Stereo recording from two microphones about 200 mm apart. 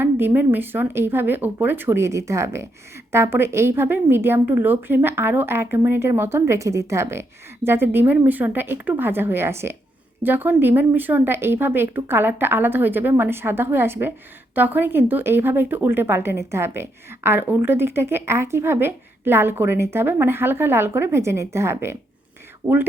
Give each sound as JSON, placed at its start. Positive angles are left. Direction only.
{"t": 0.3, "sound": "a woman's voice", "side_deg": -10}